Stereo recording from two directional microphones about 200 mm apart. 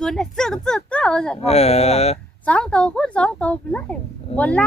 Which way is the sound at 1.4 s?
30° left (ahead or behind).